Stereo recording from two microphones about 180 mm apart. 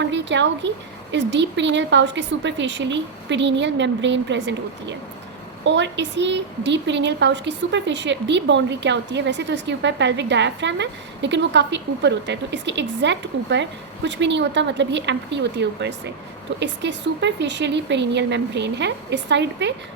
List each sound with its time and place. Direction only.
0.0 s a woman's voice: 80° right